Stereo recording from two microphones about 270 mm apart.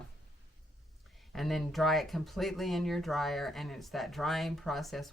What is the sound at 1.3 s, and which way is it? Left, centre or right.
Speech, centre.